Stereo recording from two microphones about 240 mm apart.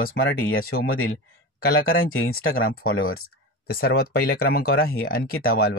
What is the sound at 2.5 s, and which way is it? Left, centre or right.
Speech, left.